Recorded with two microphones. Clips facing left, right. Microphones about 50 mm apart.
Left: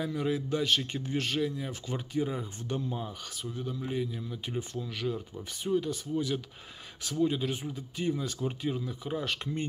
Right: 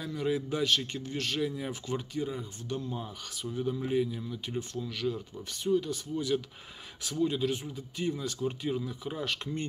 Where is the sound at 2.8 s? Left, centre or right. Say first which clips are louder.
Left 2 dB; centre.